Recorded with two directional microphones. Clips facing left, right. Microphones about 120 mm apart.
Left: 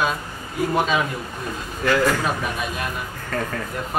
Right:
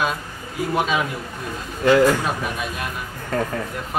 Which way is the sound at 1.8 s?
20° right (ahead or behind).